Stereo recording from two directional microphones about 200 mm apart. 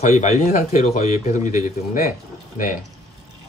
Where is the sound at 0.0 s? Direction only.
35° left (ahead or behind).